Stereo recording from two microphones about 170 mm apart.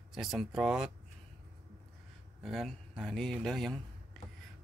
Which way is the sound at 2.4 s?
Centre (ahead or behind).